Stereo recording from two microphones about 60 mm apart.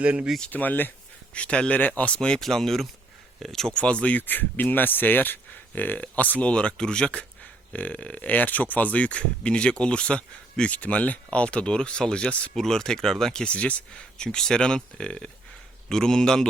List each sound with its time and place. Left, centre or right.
0.0 s speech: right
0.5 s speech: left
1.3 s speech: centre
2.4 s speech: centre
3.8 s speech: centre
4.3 s speech: left; by 16.5 s centre